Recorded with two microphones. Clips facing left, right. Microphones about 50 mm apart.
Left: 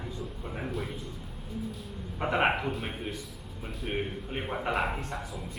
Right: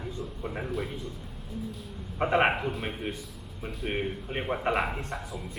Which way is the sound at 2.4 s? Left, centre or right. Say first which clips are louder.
Right 1 dB; centre.